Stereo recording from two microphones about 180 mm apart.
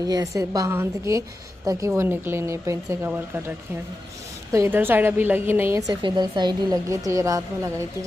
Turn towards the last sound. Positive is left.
turn(degrees=-20)  # may be behind; listen again after turning